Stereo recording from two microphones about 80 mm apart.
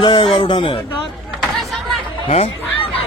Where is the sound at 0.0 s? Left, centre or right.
Left.